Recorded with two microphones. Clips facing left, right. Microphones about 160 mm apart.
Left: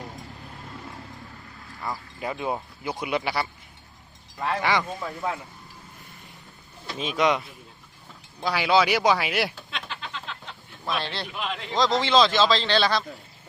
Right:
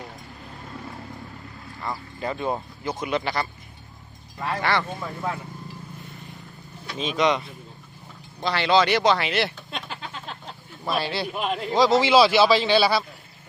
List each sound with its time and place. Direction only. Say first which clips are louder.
1.8 s speech: right 2 dB; 10° left (ahead or behind)
4.6 s speech: right 2 dB; 10° left (ahead or behind)
6.8 s speech: right 1 dB; 5° left (ahead or behind)
9.7 s a sound: right 1 dB; 45° right (ahead or behind)
10.8 s speech: right 4 dB; 5° right (ahead or behind)
11.3 s speech: right 5 dB; 45° right (ahead or behind)
11.7 s speech: right 4 dB; 10° right (ahead or behind)